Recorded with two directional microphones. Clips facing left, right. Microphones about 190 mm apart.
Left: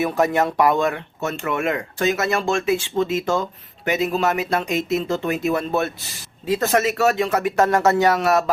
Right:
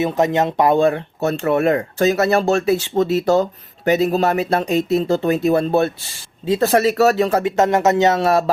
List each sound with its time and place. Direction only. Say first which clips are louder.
0.0 s speech: right 2 dB; 20° right (ahead or behind)